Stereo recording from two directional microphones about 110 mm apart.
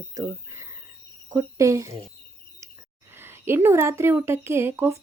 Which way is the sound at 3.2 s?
25° right (ahead or behind).